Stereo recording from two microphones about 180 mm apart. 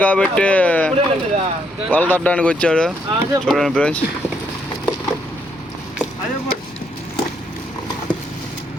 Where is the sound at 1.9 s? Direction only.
10° left (ahead or behind).